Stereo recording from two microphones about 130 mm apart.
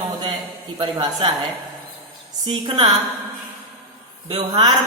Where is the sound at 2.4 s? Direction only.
35° right (ahead or behind).